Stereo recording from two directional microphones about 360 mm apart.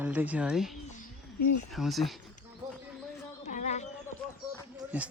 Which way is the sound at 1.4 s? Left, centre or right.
Left.